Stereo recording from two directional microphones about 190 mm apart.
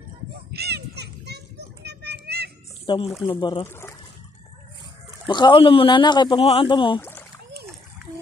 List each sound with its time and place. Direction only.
0.5 s children playing: 60° right (ahead or behind)
2.9 s speech: 25° left (ahead or behind)
3.6 s speech: 10° left (ahead or behind)
5.3 s speech: 25° left (ahead or behind)
7.0 s rowboat: 10° left (ahead or behind)